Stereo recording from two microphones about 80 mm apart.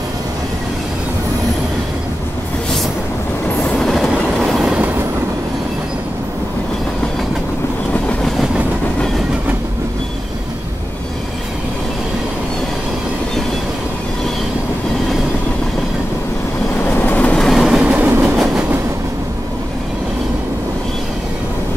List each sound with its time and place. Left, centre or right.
3.6 s train: centre
3.9 s train: centre
7.9 s train: centre
17.0 s train: centre
17.4 s train: centre
17.8 s train: right
18.2 s train: centre